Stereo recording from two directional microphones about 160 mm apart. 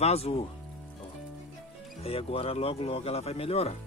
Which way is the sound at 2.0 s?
35° left (ahead or behind).